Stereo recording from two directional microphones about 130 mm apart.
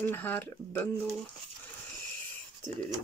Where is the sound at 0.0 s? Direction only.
15° left (ahead or behind).